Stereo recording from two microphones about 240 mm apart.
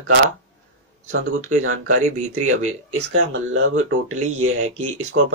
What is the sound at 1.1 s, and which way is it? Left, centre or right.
Speech, right.